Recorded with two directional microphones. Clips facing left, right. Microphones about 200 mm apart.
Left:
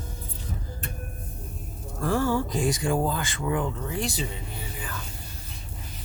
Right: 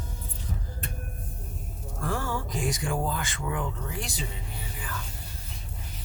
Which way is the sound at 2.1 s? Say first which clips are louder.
Left 7 dB; 30° left (ahead or behind).